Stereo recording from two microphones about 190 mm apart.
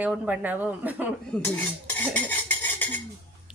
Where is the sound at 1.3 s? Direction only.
10° left (ahead or behind).